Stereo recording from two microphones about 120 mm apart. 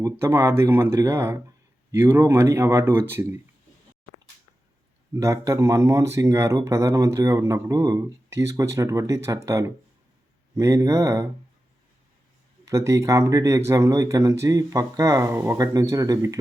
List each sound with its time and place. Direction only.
0.0 s speech: 20° right (ahead or behind)
5.1 s speech: 25° right (ahead or behind)
12.6 s speech: 25° right (ahead or behind)